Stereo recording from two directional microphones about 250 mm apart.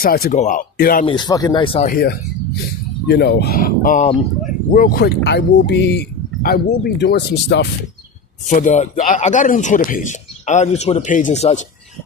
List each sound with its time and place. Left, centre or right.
0.0 s speech: left
1.0 s speech: centre; by 7.7 s left
8.4 s speech: left